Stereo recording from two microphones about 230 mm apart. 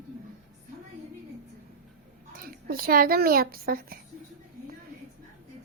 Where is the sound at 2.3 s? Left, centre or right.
Right.